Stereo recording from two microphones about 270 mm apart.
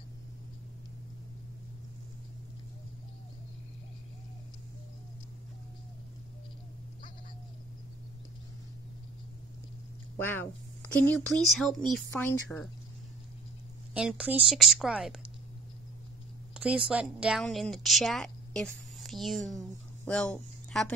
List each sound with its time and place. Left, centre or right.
10.1 s a woman's voice: centre
13.9 s a woman's voice: centre
16.5 s a woman's voice: centre